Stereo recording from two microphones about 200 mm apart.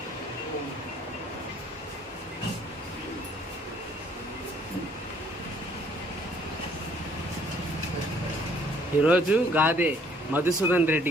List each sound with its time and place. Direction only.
9.0 s a man's voice: 5° right (ahead or behind)